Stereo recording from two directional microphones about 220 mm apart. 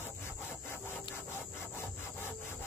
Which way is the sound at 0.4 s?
10° left (ahead or behind).